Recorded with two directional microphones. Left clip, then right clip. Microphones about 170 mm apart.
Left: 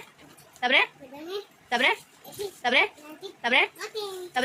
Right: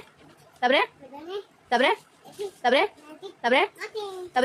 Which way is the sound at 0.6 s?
30° right (ahead or behind).